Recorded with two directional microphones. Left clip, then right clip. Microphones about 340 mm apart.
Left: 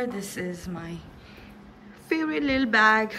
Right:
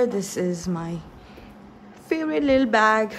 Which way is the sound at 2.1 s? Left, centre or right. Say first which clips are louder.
Right 5 dB; centre.